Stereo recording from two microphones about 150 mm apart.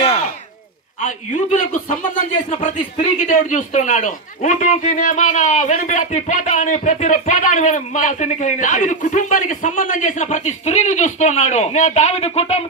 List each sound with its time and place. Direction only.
1.0 s speech: 55° left (ahead or behind)